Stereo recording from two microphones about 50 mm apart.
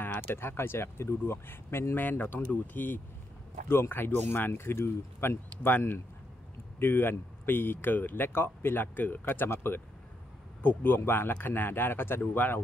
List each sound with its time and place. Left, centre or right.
0.3 s speech: left
2.0 s speech: left
3.6 s speech: left
6.8 s speech: left
9.2 s speech: left
10.6 s speech: left
12.2 s speech: left